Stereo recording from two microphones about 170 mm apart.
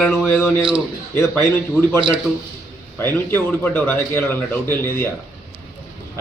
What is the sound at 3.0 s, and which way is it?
A man's voice, 10° left (ahead or behind).